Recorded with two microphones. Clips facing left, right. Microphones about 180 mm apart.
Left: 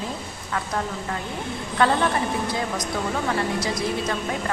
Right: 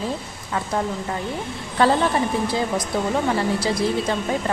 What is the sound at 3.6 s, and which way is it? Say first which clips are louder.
Speech: right 4 dB; 30° right (ahead or behind).